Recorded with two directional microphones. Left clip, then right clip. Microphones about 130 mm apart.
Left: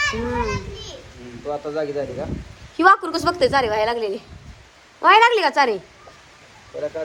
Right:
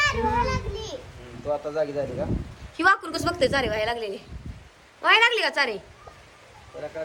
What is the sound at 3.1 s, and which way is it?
A woman's voice, 30° left (ahead or behind).